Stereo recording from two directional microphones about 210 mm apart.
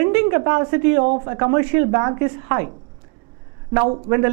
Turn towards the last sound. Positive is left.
turn(degrees=-15)  # may be behind; listen again after turning